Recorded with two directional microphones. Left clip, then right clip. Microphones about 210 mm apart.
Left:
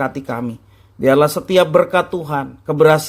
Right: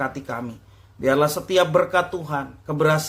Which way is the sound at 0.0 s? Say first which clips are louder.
Left 6 dB; 30° left (ahead or behind).